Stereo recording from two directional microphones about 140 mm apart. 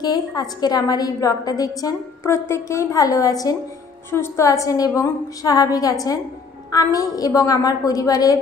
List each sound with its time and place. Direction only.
0.0 s a woman's voice: 30° left (ahead or behind)